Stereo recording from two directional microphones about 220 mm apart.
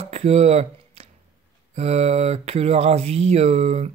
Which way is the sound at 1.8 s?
30° right (ahead or behind).